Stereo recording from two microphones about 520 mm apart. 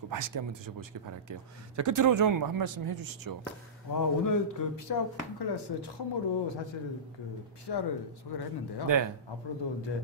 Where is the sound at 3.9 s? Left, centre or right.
Left.